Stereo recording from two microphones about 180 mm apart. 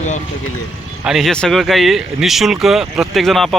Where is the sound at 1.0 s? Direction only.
Centre (ahead or behind).